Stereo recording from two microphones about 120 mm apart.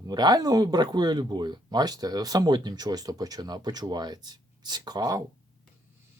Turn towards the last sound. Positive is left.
turn(degrees=-30)  # may be behind; listen again after turning